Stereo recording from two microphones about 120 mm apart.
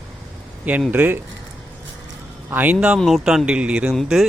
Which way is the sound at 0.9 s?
15° right (ahead or behind).